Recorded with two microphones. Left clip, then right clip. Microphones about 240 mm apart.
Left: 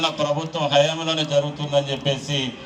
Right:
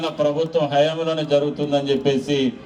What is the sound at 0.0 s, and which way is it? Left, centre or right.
A man's voice, right.